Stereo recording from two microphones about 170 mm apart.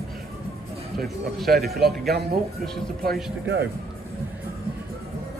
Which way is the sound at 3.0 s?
65° right (ahead or behind).